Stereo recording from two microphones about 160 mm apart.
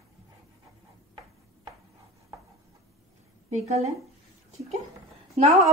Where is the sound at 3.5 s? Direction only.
40° right (ahead or behind).